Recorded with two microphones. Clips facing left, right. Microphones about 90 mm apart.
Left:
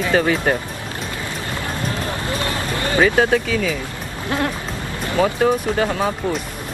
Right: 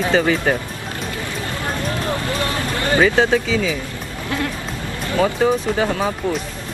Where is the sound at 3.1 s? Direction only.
5° left (ahead or behind).